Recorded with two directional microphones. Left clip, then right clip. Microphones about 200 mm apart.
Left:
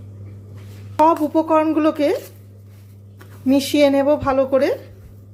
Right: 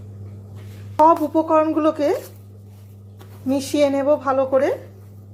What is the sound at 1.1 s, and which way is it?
A woman's voice, 15° left (ahead or behind).